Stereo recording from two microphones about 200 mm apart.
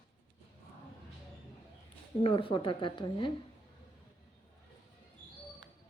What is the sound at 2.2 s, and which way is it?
Speech, 25° left (ahead or behind).